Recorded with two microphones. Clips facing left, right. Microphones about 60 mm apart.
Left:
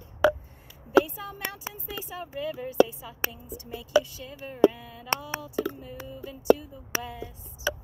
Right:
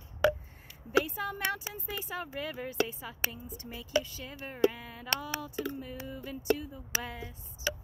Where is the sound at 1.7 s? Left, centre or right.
Right.